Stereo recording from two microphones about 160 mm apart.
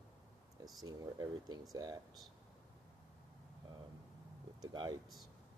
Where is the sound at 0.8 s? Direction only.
25° right (ahead or behind).